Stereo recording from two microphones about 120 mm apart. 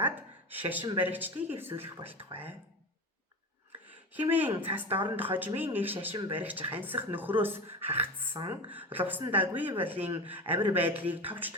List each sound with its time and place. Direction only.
0.0 s a sound: 15° right (ahead or behind)
0.9 s speech: 15° right (ahead or behind)
4.1 s speech: 15° right (ahead or behind)